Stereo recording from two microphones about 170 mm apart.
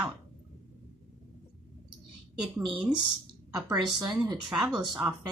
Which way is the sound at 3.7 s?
25° right (ahead or behind).